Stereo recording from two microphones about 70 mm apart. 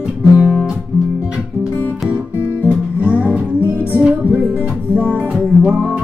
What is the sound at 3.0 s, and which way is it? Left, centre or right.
Music, centre.